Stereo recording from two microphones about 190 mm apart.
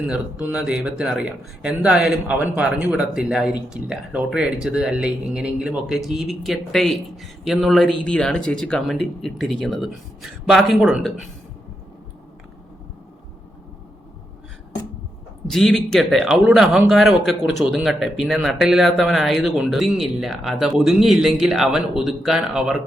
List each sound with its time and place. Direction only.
0.1 s speech: 5° right (ahead or behind)
15.4 s speech: centre (ahead or behind)